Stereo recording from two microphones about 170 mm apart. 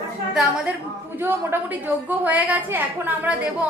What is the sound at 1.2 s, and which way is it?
A woman's voice, 15° right (ahead or behind).